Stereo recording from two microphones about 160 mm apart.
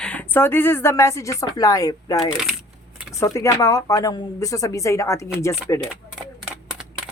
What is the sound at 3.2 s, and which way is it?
Speech, 20° left (ahead or behind).